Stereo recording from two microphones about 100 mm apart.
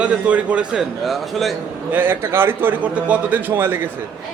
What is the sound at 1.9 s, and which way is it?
A man's voice, 20° right (ahead or behind).